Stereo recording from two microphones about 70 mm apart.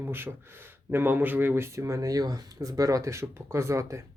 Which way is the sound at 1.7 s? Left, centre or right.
Right.